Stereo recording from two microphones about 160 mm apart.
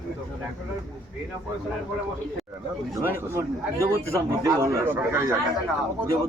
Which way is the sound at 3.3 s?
20° right (ahead or behind).